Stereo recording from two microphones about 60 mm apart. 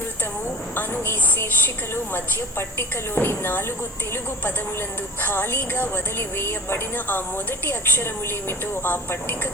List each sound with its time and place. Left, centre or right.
0.4 s a woman's voice: left